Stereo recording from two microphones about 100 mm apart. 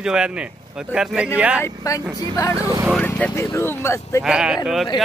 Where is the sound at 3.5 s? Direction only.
25° left (ahead or behind).